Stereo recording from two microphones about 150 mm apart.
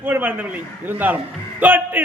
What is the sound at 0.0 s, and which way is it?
A man's voice, 15° right (ahead or behind).